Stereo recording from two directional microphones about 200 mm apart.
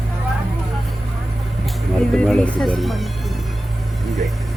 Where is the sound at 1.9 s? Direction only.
5° left (ahead or behind).